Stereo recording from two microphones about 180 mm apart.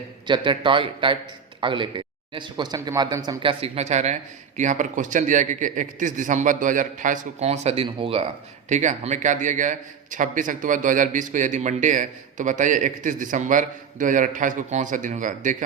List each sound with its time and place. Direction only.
0.3 s a man's voice: 25° right (ahead or behind)
8.7 s a man's voice: 40° right (ahead or behind)